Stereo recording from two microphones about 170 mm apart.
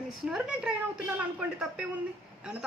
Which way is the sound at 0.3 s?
5° right (ahead or behind).